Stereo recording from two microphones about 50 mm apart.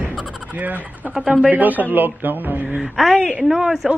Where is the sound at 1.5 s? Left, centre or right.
Right.